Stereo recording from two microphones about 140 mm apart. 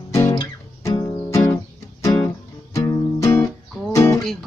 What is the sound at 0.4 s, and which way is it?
Music, 25° left (ahead or behind).